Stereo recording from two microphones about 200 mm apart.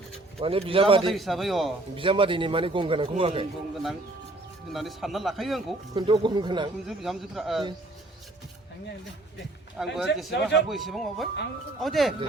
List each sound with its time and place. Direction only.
0.3 s a man's voice: 30° right (ahead or behind)
1.1 s a man's voice: centre (ahead or behind)
2.0 s a man's voice: 25° right (ahead or behind)
4.7 s a man's voice: centre (ahead or behind)
5.9 s a man's voice: 25° right (ahead or behind)
6.8 s a man's voice: centre (ahead or behind)
9.7 s a man's voice: centre (ahead or behind)